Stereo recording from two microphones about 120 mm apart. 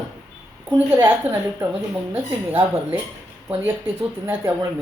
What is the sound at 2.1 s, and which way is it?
Speech, 15° right (ahead or behind).